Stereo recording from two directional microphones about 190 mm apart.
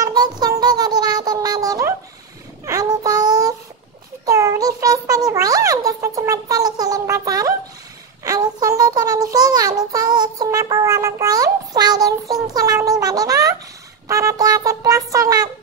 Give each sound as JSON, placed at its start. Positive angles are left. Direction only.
{"t": 0.0, "sound": "music", "side_deg": -20}
{"t": 2.6, "sound": "child singing", "side_deg": -20}
{"t": 4.3, "sound": "a sound", "side_deg": -15}